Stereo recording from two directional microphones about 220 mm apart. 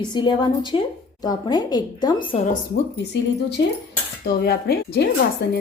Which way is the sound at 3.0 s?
50° left (ahead or behind).